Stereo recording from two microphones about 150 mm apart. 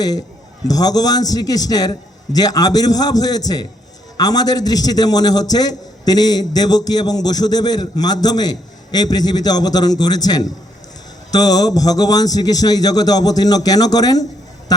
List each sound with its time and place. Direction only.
0.7 s a man's voice: 25° left (ahead or behind)